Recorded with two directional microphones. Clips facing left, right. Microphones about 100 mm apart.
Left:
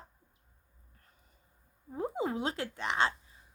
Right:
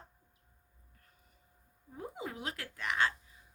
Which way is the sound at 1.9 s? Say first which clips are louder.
Left 9 dB; 30° left (ahead or behind).